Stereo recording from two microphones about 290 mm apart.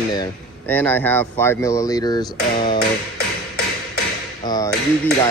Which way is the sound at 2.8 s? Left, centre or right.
Left.